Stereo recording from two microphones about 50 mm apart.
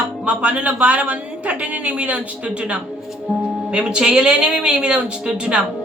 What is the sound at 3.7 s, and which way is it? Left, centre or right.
A woman's voice, centre.